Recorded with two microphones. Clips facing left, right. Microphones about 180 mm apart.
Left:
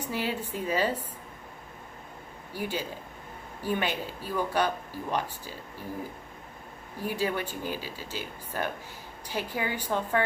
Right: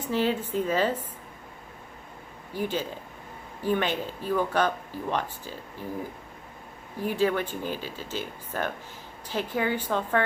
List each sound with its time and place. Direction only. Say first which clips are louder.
0.0 s speech: right 5 dB; 10° left (ahead or behind)
2.5 s speech: right 3 dB; 10° left (ahead or behind)
7.1 s speech: right 5 dB; 10° left (ahead or behind)